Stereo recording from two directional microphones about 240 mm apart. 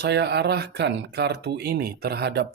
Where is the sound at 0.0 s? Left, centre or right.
Right.